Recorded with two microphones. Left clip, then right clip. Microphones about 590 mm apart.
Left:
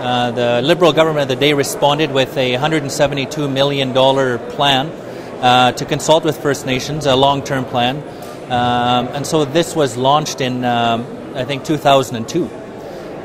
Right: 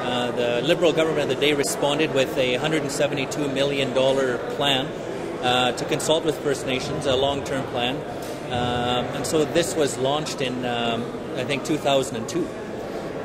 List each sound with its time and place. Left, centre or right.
0.0 s a man's voice: left